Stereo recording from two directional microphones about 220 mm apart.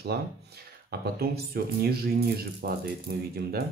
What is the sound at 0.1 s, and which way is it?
Speech, 45° right (ahead or behind).